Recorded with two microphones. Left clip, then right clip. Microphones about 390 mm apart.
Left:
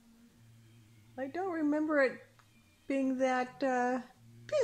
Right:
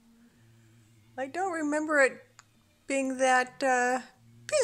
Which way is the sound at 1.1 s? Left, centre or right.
Right.